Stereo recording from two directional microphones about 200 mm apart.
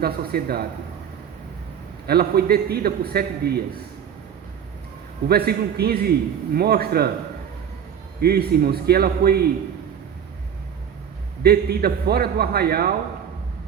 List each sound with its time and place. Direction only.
0.0 s a man's voice: 50° right (ahead or behind)
2.0 s a man's voice: 50° right (ahead or behind)
5.3 s a man's voice: 50° right (ahead or behind)
8.2 s a man's voice: 50° right (ahead or behind)
11.4 s a man's voice: 50° right (ahead or behind)